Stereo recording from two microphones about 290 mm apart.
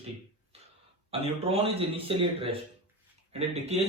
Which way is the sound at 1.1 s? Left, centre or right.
Centre.